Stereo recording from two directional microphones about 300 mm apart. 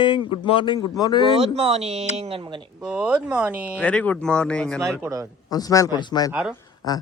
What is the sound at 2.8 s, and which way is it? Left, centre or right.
Speech, centre.